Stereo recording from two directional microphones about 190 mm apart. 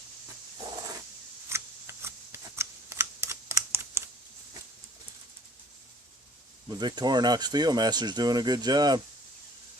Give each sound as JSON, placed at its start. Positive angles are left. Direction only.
{"t": 1.5, "sound": "shuffling cards", "side_deg": -15}
{"t": 6.7, "sound": "speech", "side_deg": -20}